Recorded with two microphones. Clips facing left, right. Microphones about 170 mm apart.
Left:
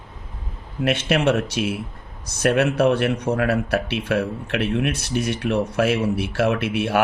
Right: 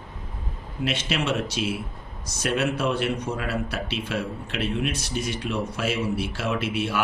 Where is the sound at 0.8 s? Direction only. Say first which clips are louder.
Left 7 dB; 60° left (ahead or behind).